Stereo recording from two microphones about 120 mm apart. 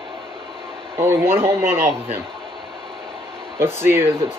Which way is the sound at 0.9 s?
20° right (ahead or behind).